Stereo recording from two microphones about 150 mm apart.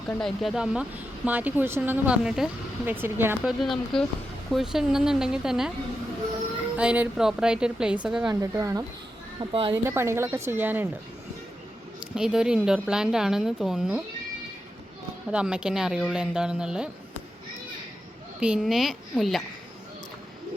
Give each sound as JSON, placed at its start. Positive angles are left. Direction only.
{"t": 0.1, "sound": "speech", "side_deg": 5}
{"t": 3.4, "sound": "a woman's voice", "side_deg": 0}
{"t": 6.7, "sound": "a woman's voice", "side_deg": -10}
{"t": 8.3, "sound": "speech", "side_deg": -20}
{"t": 9.4, "sound": "speech", "side_deg": -35}
{"t": 9.7, "sound": "speech", "side_deg": -15}
{"t": 12.1, "sound": "a woman's voice", "side_deg": -5}
{"t": 15.3, "sound": "a woman's voice", "side_deg": -5}
{"t": 18.3, "sound": "a woman's voice", "side_deg": -5}